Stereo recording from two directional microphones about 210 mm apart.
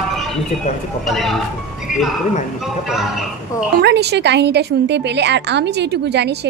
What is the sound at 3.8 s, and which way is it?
A woman's voice, 55° right (ahead or behind).